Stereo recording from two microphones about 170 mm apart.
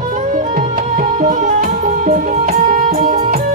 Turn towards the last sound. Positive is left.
turn(degrees=-50)  # may be behind; listen again after turning